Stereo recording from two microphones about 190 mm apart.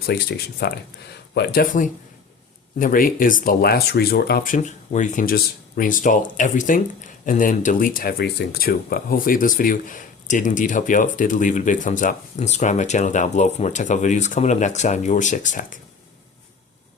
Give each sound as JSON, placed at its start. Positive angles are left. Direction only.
{"t": 0.0, "sound": "speech", "side_deg": 55}